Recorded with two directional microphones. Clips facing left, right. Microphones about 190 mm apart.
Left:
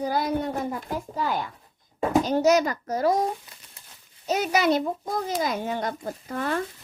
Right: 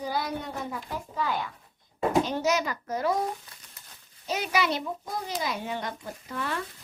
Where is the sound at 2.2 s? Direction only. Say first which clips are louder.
Left 7 dB; 45° left (ahead or behind).